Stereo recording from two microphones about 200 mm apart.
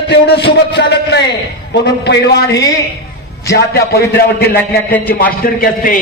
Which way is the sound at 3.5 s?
50° left (ahead or behind).